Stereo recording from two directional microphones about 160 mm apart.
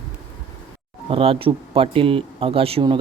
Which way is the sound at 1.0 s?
35° right (ahead or behind).